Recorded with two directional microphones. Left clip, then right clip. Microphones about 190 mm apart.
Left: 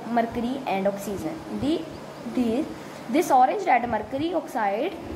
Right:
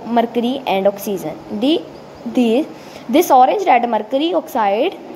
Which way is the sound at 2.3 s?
35° right (ahead or behind).